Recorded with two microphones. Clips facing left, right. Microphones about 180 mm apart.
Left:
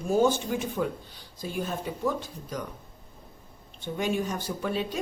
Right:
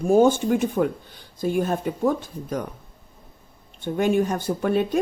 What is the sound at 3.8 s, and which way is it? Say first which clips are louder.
Speech: right 8 dB; 55° right (ahead or behind).